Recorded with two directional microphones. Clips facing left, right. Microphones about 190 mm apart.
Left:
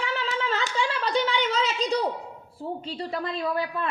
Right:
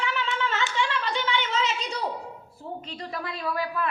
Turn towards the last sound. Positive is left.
turn(degrees=30)  # may be behind; listen again after turning